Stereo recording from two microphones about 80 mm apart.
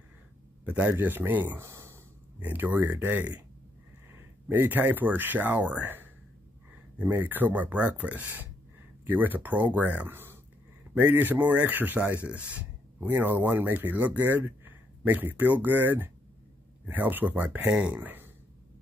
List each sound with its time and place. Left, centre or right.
0.7 s speech: centre
1.6 s a sound: right
2.4 s speech: right
4.5 s speech: right